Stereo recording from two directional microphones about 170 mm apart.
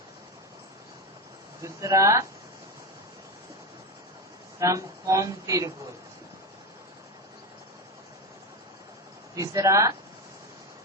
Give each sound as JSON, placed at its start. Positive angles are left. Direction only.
{"t": 1.6, "sound": "speech", "side_deg": -20}
{"t": 4.6, "sound": "speech", "side_deg": -20}
{"t": 9.3, "sound": "speech", "side_deg": -20}